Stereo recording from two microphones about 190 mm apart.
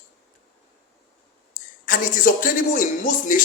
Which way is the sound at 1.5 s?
45° left (ahead or behind).